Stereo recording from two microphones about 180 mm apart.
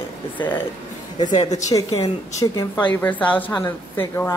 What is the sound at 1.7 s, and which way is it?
Speech, 25° left (ahead or behind).